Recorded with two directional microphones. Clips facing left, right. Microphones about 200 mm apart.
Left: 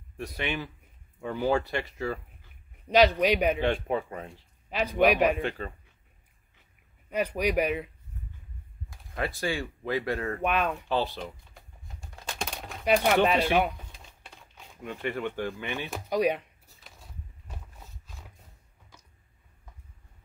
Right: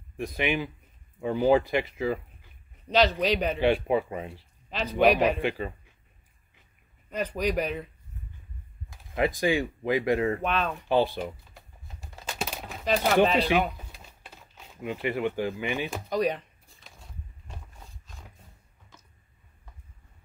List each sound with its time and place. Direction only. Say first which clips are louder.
0.4 s speech: right 5 dB; 10° right (ahead or behind)
2.9 s speech: left 2 dB; 10° left (ahead or behind)
3.6 s speech: right 4 dB; 10° right (ahead or behind)
4.6 s a sound: left 2 dB; 10° left (ahead or behind)
5.0 s speech: right 1 dB; 10° left (ahead or behind)
5.4 s speech: right 3 dB; 10° right (ahead or behind)
7.1 s speech: left 1 dB; 10° left (ahead or behind)
9.1 s speech: right 6 dB; 15° right (ahead or behind)
10.4 s speech: left 1 dB; 10° left (ahead or behind)
10.9 s speech: right 5 dB; 15° right (ahead or behind)
12.0 s a sound: right 2 dB; 5° right (ahead or behind)
12.8 s speech: even; 10° left (ahead or behind)
13.7 s a sound: right 1 dB; 5° right (ahead or behind)
16.1 s a sound: left 2 dB; 10° left (ahead or behind)